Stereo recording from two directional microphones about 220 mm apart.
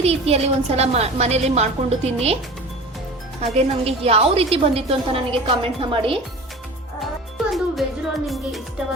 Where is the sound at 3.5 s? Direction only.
25° right (ahead or behind).